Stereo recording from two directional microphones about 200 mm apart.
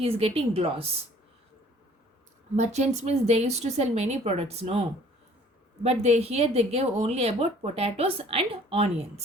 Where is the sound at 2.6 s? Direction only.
35° right (ahead or behind).